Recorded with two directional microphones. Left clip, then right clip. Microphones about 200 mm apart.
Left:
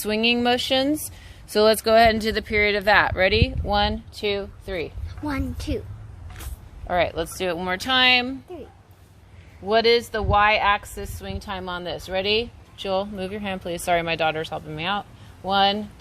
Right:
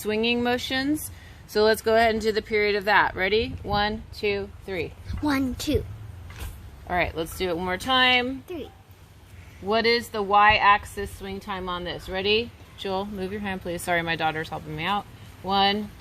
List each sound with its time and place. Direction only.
0.0 s a woman's voice: 45° left (ahead or behind); by 4.9 s 30° left (ahead or behind)
5.2 s a woman's voice: 50° right (ahead or behind)
6.8 s a woman's voice: 35° left (ahead or behind)
9.6 s a woman's voice: 30° left (ahead or behind)